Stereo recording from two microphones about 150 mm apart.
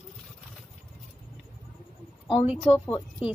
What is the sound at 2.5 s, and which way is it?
Speech, 10° right (ahead or behind).